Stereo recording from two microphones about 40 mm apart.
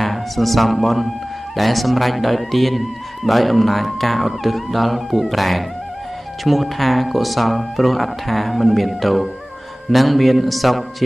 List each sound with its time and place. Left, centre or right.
0.0 s a man's voice: centre